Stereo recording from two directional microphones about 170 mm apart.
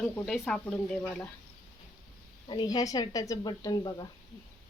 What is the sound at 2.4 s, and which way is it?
Speech, 25° left (ahead or behind).